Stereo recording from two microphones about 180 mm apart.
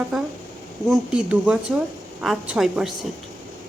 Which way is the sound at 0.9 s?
5° right (ahead or behind).